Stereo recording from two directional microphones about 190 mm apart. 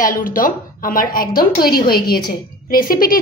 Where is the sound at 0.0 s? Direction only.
45° left (ahead or behind).